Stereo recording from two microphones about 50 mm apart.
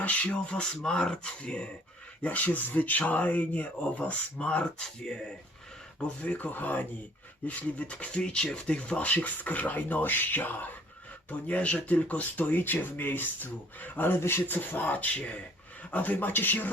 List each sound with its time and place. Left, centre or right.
0.0 s speech: left
0.8 s speech: centre
5.0 s speech: centre
6.1 s speech: left
7.4 s speech: left
14.2 s speech: left